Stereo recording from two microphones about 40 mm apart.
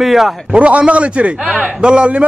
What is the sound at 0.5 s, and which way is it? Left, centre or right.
A man's voice, right.